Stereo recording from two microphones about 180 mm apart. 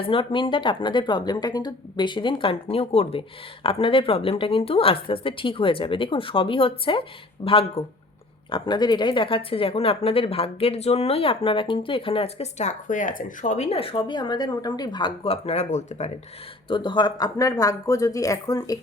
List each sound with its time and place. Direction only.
0.0 s speech: 30° left (ahead or behind)
16.6 s speech: 25° left (ahead or behind)